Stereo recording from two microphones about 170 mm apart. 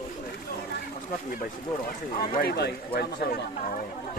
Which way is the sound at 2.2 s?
60° left (ahead or behind).